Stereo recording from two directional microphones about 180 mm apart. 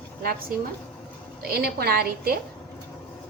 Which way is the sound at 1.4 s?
60° right (ahead or behind).